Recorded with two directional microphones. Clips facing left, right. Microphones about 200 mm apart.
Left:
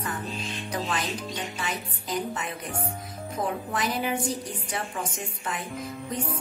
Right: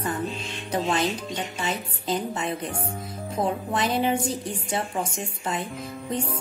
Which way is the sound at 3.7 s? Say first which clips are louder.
Right 4 dB; 25° right (ahead or behind).